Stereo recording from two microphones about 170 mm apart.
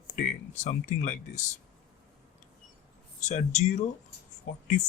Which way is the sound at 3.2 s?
40° left (ahead or behind).